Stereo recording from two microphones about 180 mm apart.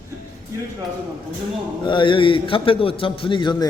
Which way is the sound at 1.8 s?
25° left (ahead or behind).